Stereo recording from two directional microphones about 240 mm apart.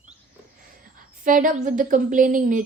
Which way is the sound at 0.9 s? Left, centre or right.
Right.